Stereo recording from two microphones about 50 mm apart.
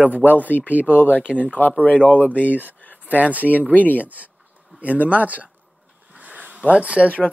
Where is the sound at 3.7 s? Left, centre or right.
Left.